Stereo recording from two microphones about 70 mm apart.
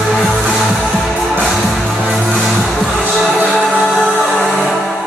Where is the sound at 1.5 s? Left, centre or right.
Centre.